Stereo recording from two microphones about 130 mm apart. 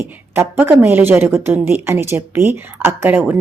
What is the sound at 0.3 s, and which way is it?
A woman's voice, 15° right (ahead or behind).